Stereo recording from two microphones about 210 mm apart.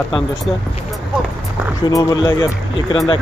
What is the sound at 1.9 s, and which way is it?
Speech, 15° left (ahead or behind).